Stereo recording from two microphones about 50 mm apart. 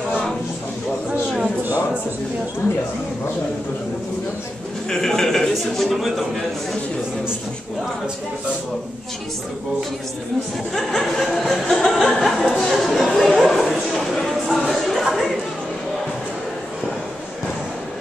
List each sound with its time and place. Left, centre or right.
4.8 s speech: centre
5.5 s a man's voice: centre
10.7 s a man's voice: centre
14.1 s a sound: centre
15.1 s chatter: centre